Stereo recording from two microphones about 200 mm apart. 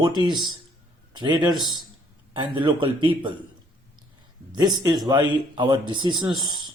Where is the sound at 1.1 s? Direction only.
25° right (ahead or behind).